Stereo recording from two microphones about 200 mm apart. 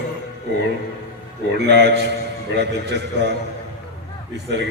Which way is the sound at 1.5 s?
55° right (ahead or behind).